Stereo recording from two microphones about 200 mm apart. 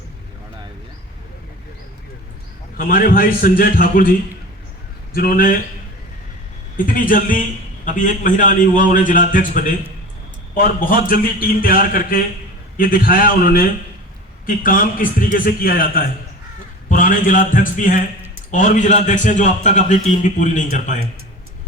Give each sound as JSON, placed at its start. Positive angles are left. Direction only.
{"t": 2.7, "sound": "a man's voice", "side_deg": 45}
{"t": 5.1, "sound": "a man's voice", "side_deg": 45}
{"t": 6.7, "sound": "a man's voice", "side_deg": 45}